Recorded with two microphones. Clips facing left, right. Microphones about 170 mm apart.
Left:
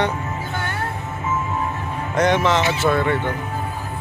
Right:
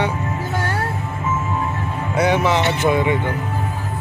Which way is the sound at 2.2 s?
10° right (ahead or behind).